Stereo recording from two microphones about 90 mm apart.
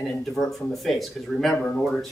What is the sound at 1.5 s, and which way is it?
Speech, 15° left (ahead or behind).